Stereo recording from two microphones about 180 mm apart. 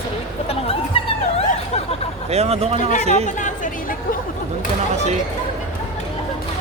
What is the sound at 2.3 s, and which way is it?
Speech, 35° right (ahead or behind).